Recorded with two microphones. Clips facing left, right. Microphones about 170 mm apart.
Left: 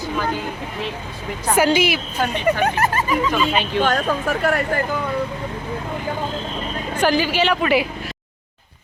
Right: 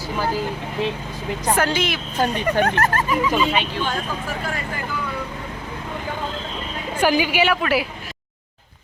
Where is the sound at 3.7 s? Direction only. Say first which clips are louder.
Left 6 dB; 65° left (ahead or behind).